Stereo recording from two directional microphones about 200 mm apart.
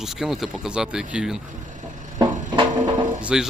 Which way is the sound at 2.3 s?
40° right (ahead or behind).